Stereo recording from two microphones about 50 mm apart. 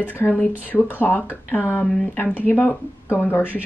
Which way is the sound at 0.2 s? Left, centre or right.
Left.